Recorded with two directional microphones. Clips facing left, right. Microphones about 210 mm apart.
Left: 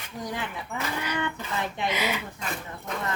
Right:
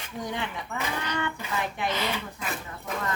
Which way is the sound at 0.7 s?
15° left (ahead or behind).